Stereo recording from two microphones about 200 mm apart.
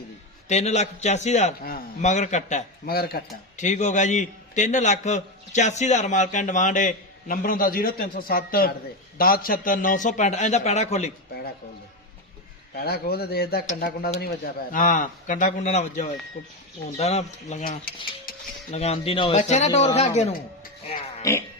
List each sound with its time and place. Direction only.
0.4 s a man's voice: 35° left (ahead or behind); by 3.2 s 50° left (ahead or behind)
3.6 s a man's voice: 35° left (ahead or behind)
12.7 s a man's voice: 50° left (ahead or behind); by 17.6 s 30° left (ahead or behind)
17.6 s speech: 45° left (ahead or behind)
18.7 s a man's voice: 30° left (ahead or behind)
21.2 s speech: 15° left (ahead or behind)